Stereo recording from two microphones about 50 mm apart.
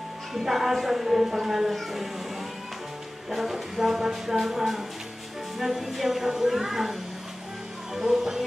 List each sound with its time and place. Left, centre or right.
0.3 s speech: centre
3.3 s speech: centre